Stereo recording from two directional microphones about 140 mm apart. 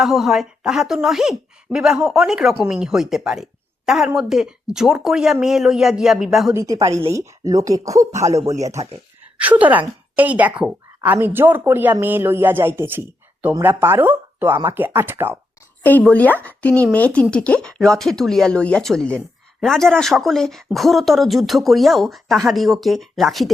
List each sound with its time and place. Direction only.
0.0 s speech: centre (ahead or behind)
6.5 s a woman's voice: 20° right (ahead or behind)
8.2 s speech: 55° right (ahead or behind)
8.6 s a woman's voice: 25° right (ahead or behind)
9.4 s speech: 10° right (ahead or behind)
15.8 s speech: 10° left (ahead or behind)